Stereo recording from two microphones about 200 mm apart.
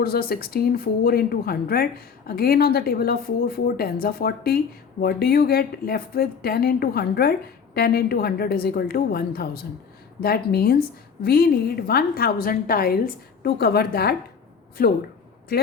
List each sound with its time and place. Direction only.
0.0 s speech: 50° left (ahead or behind)